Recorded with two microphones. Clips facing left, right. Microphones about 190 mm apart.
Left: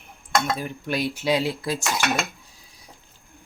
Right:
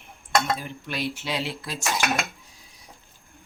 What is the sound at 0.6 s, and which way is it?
Dishes, 45° left (ahead or behind).